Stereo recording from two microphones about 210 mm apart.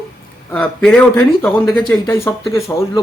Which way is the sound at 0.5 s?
5° left (ahead or behind).